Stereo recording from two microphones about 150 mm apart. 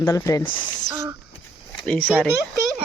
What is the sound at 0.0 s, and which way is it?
Speech, 20° left (ahead or behind).